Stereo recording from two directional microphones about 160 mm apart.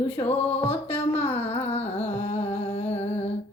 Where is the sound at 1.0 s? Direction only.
40° left (ahead or behind).